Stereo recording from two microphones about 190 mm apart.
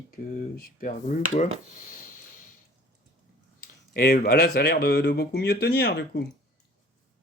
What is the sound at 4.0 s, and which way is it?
Speech, 55° left (ahead or behind).